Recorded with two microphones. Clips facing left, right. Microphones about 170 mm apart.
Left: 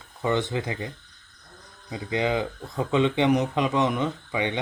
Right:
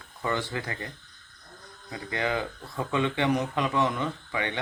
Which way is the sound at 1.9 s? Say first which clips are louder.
Left 4 dB; 15° left (ahead or behind).